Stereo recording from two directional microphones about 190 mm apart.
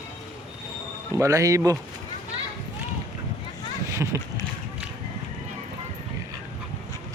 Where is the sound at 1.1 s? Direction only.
15° right (ahead or behind).